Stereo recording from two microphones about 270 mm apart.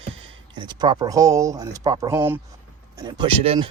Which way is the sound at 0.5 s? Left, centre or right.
Centre.